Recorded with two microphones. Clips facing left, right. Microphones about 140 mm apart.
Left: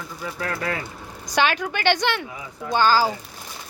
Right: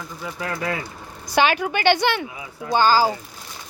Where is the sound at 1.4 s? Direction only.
5° right (ahead or behind).